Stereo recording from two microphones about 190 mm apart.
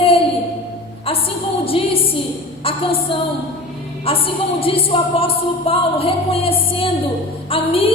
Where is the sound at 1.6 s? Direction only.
30° left (ahead or behind).